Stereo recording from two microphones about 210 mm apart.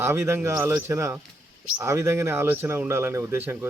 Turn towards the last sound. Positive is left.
turn(degrees=-10)  # may be behind; listen again after turning